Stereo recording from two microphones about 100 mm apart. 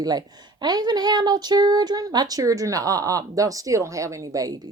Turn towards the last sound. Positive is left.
turn(degrees=-35)  # may be behind; listen again after turning